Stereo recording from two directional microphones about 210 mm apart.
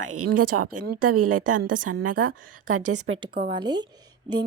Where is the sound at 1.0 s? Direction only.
90° right.